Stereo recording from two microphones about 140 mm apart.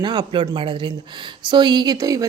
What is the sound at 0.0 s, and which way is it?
A woman's voice, 30° right (ahead or behind).